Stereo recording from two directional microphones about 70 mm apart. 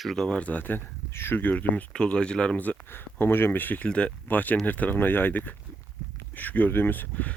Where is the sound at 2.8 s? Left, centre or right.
Left.